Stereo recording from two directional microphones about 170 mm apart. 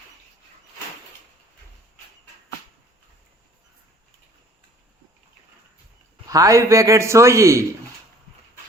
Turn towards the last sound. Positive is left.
turn(degrees=-15)  # may be behind; listen again after turning